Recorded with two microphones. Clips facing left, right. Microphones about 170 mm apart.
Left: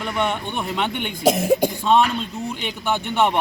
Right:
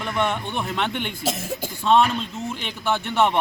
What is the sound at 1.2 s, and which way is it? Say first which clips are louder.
Speech: left 10 dB; 60° left (ahead or behind).